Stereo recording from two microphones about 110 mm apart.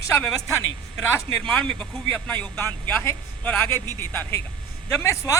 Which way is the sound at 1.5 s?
10° left (ahead or behind).